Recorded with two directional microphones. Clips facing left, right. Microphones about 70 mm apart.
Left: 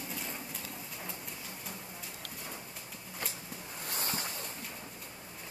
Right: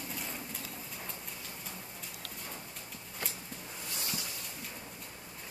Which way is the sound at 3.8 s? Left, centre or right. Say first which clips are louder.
Left 4 dB; left.